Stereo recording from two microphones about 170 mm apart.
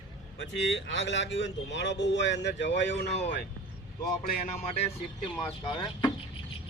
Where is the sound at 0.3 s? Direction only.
90° left.